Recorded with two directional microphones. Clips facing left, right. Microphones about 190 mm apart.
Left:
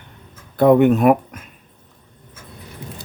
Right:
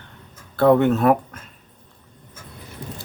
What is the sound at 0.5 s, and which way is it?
Speech, 15° left (ahead or behind).